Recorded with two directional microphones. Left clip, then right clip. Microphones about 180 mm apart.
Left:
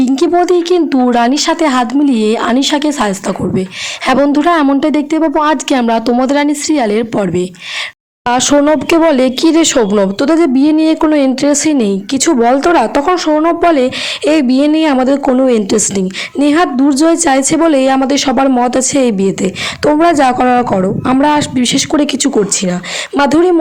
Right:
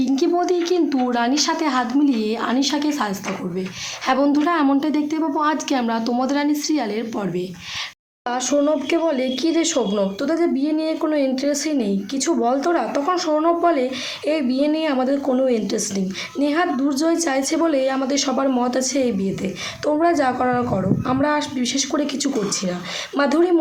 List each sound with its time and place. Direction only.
0.0 s speech: 50° left (ahead or behind)